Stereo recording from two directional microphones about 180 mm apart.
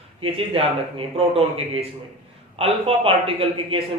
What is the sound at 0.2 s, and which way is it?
A man's voice, 30° right (ahead or behind).